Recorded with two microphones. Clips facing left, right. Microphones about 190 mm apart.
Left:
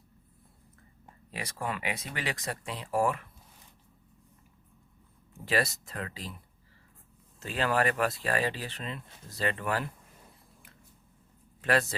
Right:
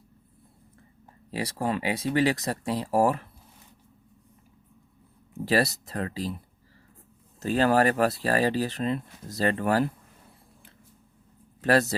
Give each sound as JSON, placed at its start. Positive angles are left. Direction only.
{"t": 1.3, "sound": "speech", "side_deg": -30}
{"t": 5.5, "sound": "speech", "side_deg": -35}
{"t": 7.3, "sound": "speech", "side_deg": -40}
{"t": 11.6, "sound": "speech", "side_deg": -40}